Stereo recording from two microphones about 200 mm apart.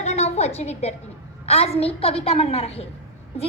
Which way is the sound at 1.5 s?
30° left (ahead or behind).